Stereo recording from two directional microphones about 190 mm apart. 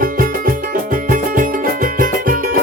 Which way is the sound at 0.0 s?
45° right (ahead or behind).